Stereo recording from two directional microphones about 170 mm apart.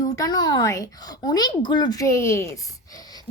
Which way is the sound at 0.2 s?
25° left (ahead or behind).